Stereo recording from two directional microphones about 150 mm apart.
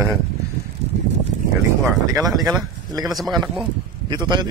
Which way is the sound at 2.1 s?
25° right (ahead or behind).